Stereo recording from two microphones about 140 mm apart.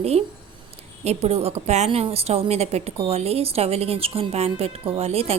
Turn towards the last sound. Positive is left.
turn(degrees=-45)  # may be behind; listen again after turning